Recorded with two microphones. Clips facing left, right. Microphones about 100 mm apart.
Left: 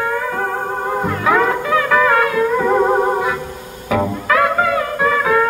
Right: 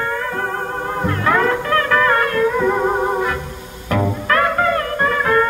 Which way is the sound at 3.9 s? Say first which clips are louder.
Left 1 dB; 5° left (ahead or behind).